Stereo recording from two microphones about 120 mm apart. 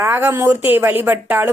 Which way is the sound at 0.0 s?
20° right (ahead or behind).